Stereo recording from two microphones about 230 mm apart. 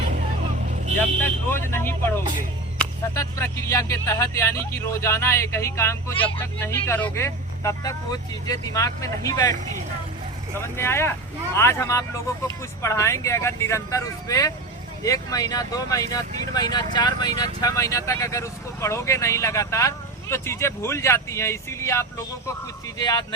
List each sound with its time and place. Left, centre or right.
0.1 s vehicle: right
1.2 s speech: centre
10.8 s speech: centre